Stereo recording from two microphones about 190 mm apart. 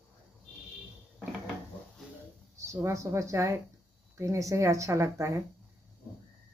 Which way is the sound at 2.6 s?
15° right (ahead or behind).